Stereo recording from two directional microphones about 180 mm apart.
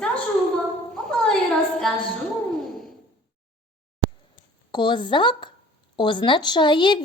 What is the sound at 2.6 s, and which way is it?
Sigh, centre (ahead or behind).